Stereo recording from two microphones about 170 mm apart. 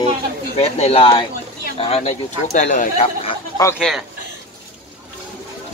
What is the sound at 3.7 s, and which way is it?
Speech, 5° right (ahead or behind).